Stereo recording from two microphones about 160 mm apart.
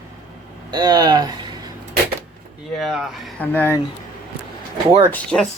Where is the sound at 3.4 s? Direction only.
10° left (ahead or behind).